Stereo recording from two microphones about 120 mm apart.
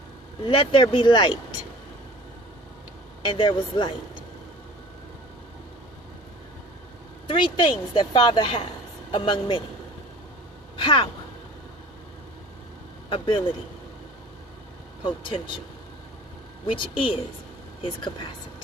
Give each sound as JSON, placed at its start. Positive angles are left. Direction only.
{"t": 0.4, "sound": "a woman's voice", "side_deg": 45}
{"t": 3.2, "sound": "a woman's voice", "side_deg": 45}
{"t": 7.3, "sound": "a woman's voice", "side_deg": 45}
{"t": 10.8, "sound": "a woman's voice", "side_deg": 45}
{"t": 13.1, "sound": "a man's voice", "side_deg": 45}
{"t": 15.0, "sound": "a woman's voice", "side_deg": 45}
{"t": 16.6, "sound": "a woman's voice", "side_deg": 45}